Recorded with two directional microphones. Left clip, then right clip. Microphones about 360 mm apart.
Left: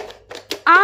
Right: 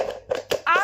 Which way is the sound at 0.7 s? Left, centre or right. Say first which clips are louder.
Left 9 dB; centre.